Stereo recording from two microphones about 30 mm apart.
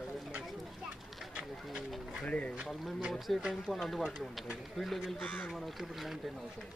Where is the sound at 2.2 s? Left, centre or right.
Left.